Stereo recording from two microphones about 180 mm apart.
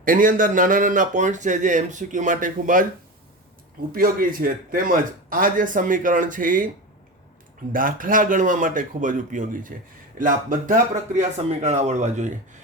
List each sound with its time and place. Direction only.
0.0 s speech: 50° right (ahead or behind)
3.9 s speech: 50° right (ahead or behind)
7.7 s speech: 50° right (ahead or behind)